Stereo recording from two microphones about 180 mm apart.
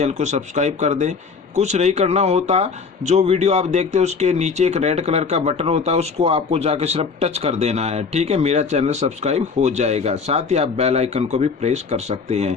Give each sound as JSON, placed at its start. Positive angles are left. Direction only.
{"t": 0.0, "sound": "speech", "side_deg": -40}